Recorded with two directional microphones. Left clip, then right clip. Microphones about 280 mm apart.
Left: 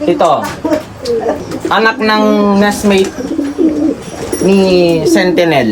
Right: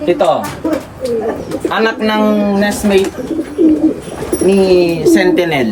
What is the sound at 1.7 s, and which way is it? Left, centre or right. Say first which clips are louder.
Speech: left 4 dB; centre.